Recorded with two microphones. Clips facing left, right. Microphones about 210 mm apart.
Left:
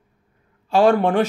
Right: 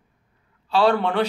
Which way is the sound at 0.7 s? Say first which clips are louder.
Left 4 dB; 45° left (ahead or behind).